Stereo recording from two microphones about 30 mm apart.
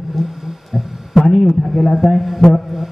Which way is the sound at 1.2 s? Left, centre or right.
Centre.